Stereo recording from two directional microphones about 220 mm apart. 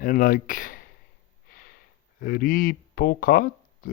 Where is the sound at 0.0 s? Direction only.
40° left (ahead or behind).